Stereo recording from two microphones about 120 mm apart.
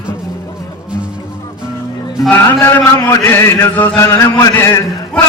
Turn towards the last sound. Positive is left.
turn(degrees=20)  # may be behind; listen again after turning